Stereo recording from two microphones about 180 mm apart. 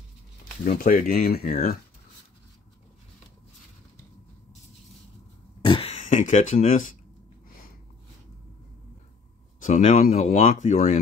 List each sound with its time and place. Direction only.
0.7 s speech: 55° left (ahead or behind)
5.6 s throat clearing: 30° left (ahead or behind); by 7.0 s 50° left (ahead or behind)
7.4 s a sound: 50° left (ahead or behind)
9.6 s speech: 45° left (ahead or behind)